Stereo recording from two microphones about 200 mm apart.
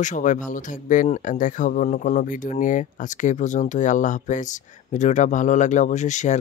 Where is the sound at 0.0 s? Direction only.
40° left (ahead or behind).